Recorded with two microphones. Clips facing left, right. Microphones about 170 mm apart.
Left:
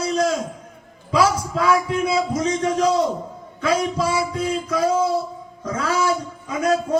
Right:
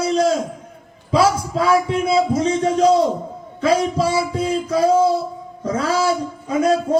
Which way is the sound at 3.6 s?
30° right (ahead or behind).